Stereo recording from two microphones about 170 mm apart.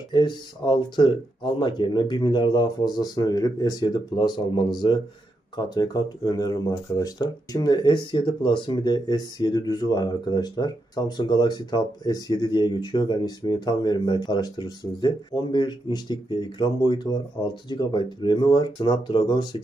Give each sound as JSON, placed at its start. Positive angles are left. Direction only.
{"t": 0.1, "sound": "speech", "side_deg": 25}